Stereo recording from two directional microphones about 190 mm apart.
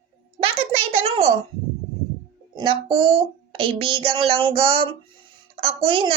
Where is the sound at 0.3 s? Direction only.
30° right (ahead or behind).